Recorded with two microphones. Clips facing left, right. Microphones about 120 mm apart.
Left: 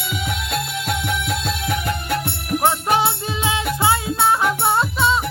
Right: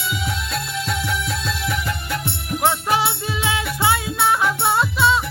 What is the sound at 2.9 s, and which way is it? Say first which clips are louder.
Music: left 2 dB; 25° left (ahead or behind).